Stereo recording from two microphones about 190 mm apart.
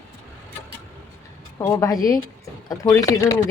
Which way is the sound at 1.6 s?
20° left (ahead or behind).